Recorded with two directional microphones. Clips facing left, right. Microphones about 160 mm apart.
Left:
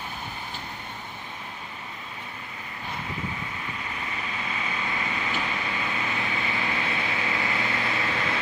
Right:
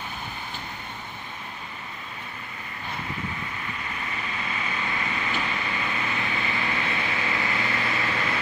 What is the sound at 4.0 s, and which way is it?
Vehicle, 15° left (ahead or behind).